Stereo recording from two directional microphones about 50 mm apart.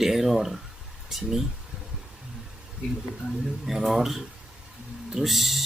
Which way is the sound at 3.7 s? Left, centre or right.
Centre.